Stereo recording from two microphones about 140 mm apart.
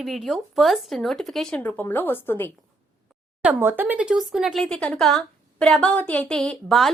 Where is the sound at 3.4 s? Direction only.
15° right (ahead or behind).